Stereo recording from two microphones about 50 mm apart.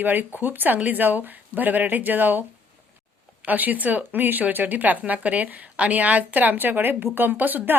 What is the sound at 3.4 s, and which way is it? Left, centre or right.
A woman's voice, right.